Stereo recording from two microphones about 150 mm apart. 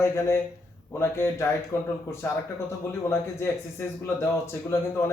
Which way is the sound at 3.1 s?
15° left (ahead or behind).